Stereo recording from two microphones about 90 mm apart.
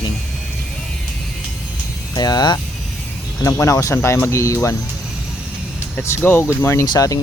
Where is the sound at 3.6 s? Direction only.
35° left (ahead or behind).